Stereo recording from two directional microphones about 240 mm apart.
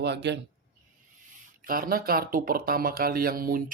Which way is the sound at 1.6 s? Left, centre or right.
Right.